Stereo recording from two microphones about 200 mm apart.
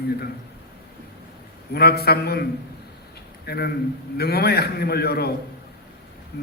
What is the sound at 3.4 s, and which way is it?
A man's voice, 50° left (ahead or behind).